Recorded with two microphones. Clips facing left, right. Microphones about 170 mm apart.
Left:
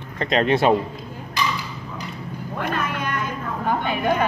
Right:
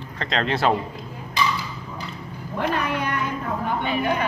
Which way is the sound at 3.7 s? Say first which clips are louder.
Left 3 dB; 50° left (ahead or behind).